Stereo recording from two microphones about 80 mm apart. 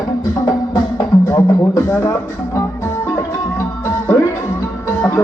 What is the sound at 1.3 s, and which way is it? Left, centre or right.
Music, left.